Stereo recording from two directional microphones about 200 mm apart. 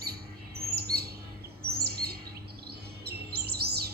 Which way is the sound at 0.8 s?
50° right (ahead or behind).